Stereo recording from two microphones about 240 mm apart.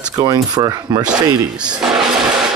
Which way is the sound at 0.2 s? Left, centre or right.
Centre.